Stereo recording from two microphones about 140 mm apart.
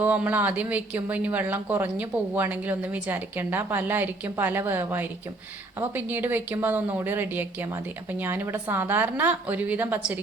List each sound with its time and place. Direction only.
0.0 s speech: 10° right (ahead or behind)